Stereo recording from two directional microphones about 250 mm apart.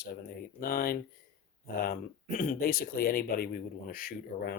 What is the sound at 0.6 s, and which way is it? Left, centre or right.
Speech, left.